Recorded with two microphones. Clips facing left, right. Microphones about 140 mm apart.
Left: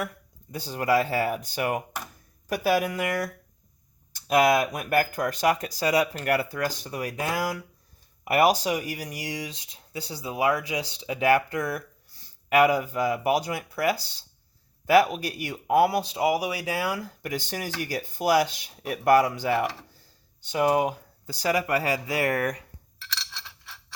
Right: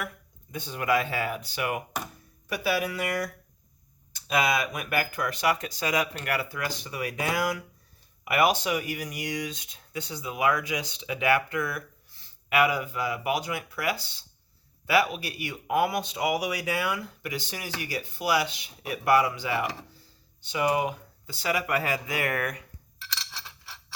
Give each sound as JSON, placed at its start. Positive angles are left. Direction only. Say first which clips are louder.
{"t": 0.5, "sound": "speech", "louder": "left 3 dB", "side_deg": 35}
{"t": 4.4, "sound": "speech", "louder": "left 5 dB", "side_deg": 45}
{"t": 23.3, "sound": "a sound", "louder": "even", "side_deg": -10}